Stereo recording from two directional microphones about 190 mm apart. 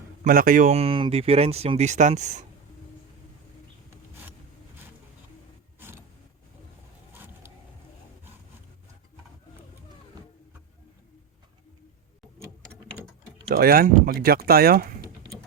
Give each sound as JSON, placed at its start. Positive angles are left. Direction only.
{"t": 0.3, "sound": "speech", "side_deg": -45}
{"t": 7.1, "sound": "vehicle", "side_deg": -10}
{"t": 13.5, "sound": "speech", "side_deg": -50}